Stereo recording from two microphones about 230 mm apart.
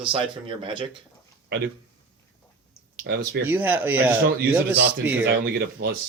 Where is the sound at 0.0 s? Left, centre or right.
Right.